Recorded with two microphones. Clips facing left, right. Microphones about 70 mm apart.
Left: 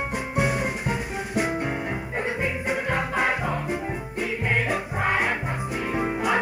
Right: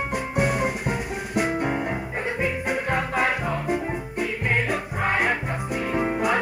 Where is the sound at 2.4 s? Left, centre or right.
Right.